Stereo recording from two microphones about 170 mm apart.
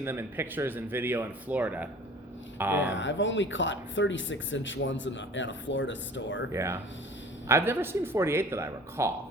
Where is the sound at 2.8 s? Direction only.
90° left.